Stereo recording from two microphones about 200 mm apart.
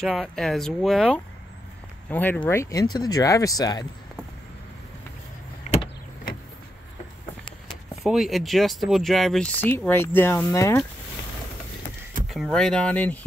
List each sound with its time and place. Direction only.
0.0 s speech: centre (ahead or behind); by 3.8 s 20° left (ahead or behind)
5.7 s vehicle: 35° left (ahead or behind)
8.0 s speech: centre (ahead or behind); by 10.8 s 15° left (ahead or behind)
12.3 s speech: centre (ahead or behind)